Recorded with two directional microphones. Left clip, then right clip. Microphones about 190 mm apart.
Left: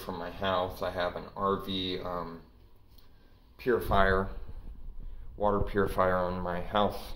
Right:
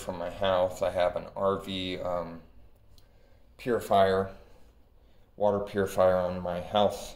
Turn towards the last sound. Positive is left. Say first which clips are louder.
# right 3 dB
turn(degrees=-25)  # may be behind; listen again after turning